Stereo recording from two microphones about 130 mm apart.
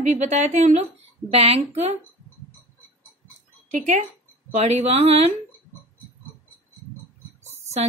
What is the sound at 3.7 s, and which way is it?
Speech, 65° right (ahead or behind).